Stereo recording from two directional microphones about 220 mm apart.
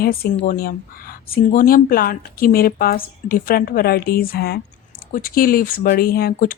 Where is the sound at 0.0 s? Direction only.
45° left (ahead or behind).